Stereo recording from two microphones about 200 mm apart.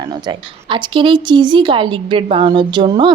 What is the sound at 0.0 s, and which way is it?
Speech, 20° right (ahead or behind).